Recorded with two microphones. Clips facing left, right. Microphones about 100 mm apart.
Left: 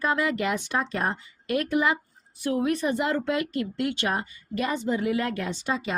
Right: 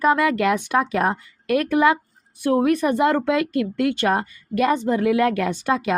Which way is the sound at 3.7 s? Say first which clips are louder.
Right 7 dB; 45° right (ahead or behind).